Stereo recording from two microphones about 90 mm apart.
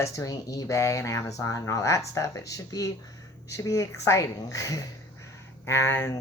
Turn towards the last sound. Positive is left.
turn(degrees=30)  # may be behind; listen again after turning